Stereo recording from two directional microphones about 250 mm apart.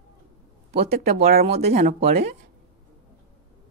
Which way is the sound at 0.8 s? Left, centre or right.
Right.